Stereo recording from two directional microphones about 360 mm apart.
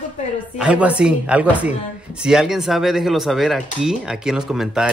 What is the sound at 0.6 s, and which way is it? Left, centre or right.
Speech, centre.